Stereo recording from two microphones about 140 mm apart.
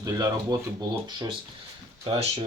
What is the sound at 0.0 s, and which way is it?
Speech, 25° right (ahead or behind).